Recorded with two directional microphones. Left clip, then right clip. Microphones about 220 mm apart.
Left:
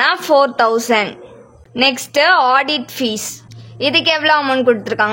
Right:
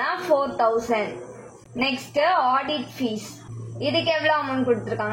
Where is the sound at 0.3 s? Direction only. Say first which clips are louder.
Left 7 dB; 40° left (ahead or behind).